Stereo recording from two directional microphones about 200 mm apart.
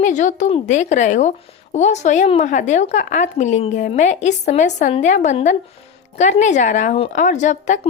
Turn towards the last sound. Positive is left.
turn(degrees=35)  # may be behind; listen again after turning